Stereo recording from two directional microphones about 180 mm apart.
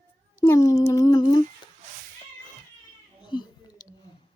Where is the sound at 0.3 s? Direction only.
15° left (ahead or behind).